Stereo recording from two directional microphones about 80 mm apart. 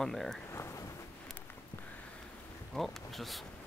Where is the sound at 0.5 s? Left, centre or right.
Left.